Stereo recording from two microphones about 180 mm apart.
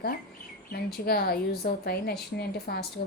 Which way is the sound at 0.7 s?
60° left (ahead or behind).